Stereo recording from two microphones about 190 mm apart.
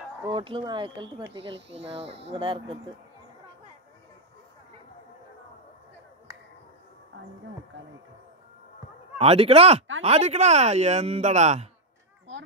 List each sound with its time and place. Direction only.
0.3 s speech: 25° right (ahead or behind)
9.2 s speech: 30° right (ahead or behind)